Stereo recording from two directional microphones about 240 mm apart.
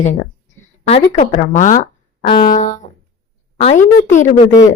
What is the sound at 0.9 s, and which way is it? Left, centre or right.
A woman's voice, left.